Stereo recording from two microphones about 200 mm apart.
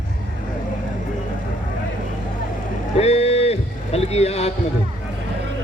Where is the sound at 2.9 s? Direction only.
30° left (ahead or behind).